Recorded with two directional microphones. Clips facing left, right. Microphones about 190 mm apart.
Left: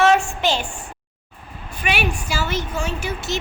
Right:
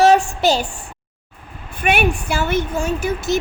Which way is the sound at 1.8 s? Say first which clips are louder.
Right 5 dB; 55° right (ahead or behind).